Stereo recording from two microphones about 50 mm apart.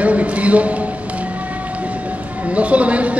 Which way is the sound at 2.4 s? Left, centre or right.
Right.